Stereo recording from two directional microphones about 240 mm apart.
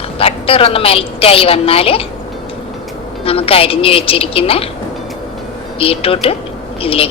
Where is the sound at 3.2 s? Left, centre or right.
Left.